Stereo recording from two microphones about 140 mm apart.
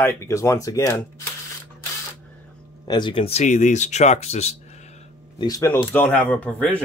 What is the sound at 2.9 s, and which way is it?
Speech, 35° left (ahead or behind).